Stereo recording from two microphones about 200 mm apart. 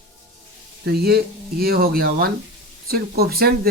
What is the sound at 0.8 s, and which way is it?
Speech, 50° right (ahead or behind).